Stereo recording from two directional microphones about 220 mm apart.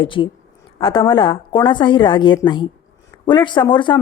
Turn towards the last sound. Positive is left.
turn(degrees=20)  # may be behind; listen again after turning